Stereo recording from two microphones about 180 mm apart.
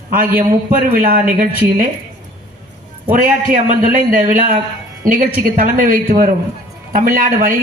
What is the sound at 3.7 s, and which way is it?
A woman's voice, 45° right (ahead or behind).